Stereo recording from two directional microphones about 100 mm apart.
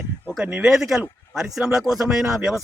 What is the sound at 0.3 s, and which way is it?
Speech, 10° right (ahead or behind).